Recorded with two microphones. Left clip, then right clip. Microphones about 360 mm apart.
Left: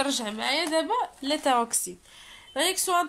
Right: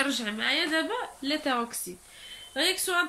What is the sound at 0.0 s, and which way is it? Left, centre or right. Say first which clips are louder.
Speech: even; centre.